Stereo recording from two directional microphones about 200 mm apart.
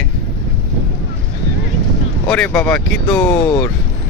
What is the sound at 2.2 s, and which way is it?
Speech, 5° left (ahead or behind).